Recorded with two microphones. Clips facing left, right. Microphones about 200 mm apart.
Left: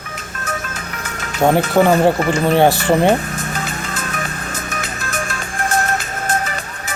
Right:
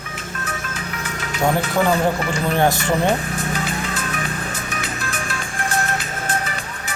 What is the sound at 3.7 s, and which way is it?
Music, 45° left (ahead or behind).